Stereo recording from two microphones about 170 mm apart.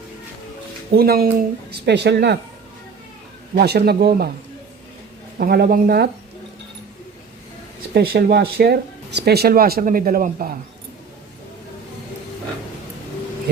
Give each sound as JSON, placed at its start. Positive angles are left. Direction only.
{"t": 0.9, "sound": "speech", "side_deg": -65}
{"t": 3.5, "sound": "speech", "side_deg": -70}
{"t": 5.4, "sound": "speech", "side_deg": -60}
{"t": 7.9, "sound": "speech", "side_deg": -65}